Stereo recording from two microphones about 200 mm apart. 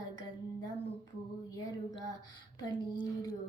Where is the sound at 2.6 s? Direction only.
20° left (ahead or behind).